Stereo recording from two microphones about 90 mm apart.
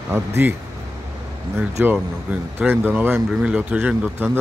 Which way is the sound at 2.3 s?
20° right (ahead or behind).